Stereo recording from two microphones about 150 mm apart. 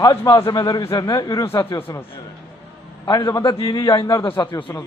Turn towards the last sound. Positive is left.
turn(degrees=30)  # may be behind; listen again after turning